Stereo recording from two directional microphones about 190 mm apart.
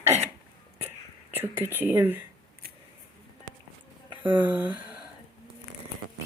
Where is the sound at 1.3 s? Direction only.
10° right (ahead or behind).